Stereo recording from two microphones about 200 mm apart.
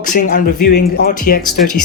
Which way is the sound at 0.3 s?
45° left (ahead or behind).